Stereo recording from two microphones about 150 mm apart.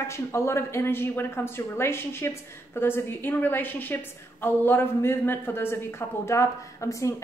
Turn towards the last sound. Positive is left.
turn(degrees=20)  # may be behind; listen again after turning